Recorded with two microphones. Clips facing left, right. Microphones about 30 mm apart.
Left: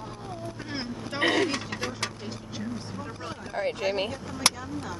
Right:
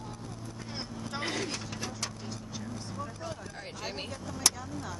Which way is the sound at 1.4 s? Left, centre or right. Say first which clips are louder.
Left 8 dB; left.